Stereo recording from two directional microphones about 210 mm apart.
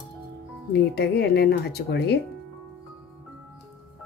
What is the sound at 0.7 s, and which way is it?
A woman's voice, 50° left (ahead or behind).